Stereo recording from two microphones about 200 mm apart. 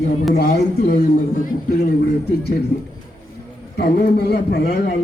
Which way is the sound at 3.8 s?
50° left (ahead or behind).